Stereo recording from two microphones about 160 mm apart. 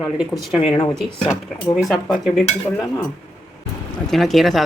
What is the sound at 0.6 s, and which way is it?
Speech, 35° left (ahead or behind).